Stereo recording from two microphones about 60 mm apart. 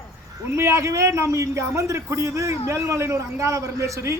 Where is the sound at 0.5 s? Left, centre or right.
Right.